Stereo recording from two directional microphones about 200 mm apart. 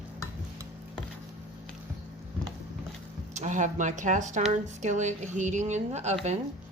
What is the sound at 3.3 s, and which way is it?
Speech, 35° right (ahead or behind).